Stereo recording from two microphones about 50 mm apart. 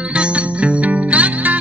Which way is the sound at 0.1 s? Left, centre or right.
Right.